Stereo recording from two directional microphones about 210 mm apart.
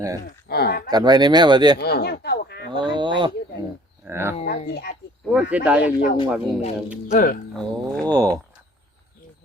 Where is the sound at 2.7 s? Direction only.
20° right (ahead or behind).